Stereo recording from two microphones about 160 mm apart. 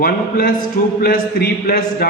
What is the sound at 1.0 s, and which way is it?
A man's voice, 75° left (ahead or behind).